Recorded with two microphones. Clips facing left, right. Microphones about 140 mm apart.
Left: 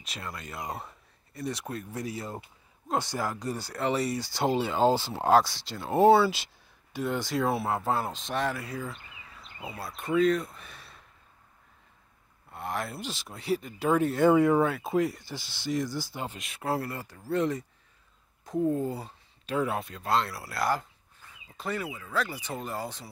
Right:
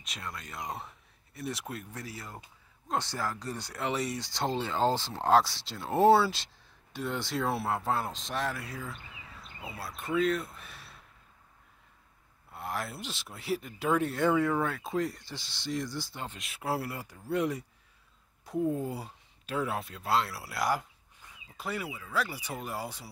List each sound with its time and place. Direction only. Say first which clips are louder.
0.0 s speech: left 2 dB; centre (ahead or behind)
1.9 s speech: left 7 dB; 15° left (ahead or behind)
2.9 s speech: left 3 dB; 10° left (ahead or behind)
3.6 s speech: left 4 dB; centre (ahead or behind)
12.5 s speech: left 3 dB; centre (ahead or behind)
14.3 s speech: left 6 dB; 15° left (ahead or behind); by 23.0 s 10° right (ahead or behind)